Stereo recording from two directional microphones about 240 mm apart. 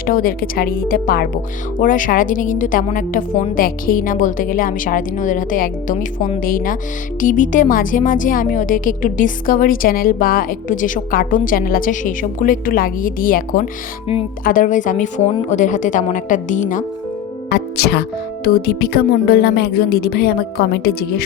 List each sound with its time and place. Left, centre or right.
0.0 s a woman's voice: left
17.5 s music: left
18.4 s a woman's voice: left